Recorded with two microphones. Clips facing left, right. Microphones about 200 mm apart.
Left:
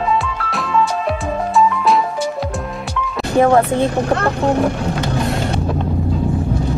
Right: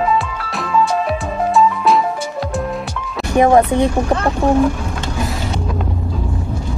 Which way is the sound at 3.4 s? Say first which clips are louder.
Right 1 dB; 15° right (ahead or behind).